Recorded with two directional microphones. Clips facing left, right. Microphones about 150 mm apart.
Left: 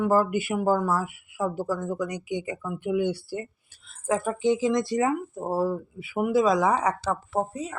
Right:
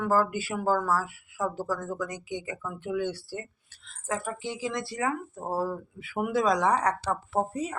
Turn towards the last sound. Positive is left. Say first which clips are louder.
# even
turn(degrees=0)  # may be behind; listen again after turning